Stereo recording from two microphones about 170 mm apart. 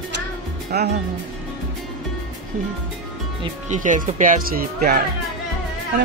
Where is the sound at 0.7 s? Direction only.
70° right (ahead or behind).